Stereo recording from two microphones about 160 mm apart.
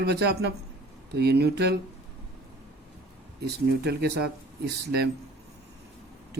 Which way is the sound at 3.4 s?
90° right.